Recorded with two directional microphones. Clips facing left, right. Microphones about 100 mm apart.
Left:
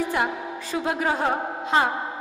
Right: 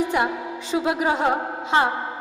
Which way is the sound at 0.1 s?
20° right (ahead or behind).